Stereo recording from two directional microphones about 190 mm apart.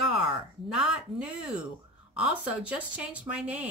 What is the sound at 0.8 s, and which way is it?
Speech, 5° right (ahead or behind).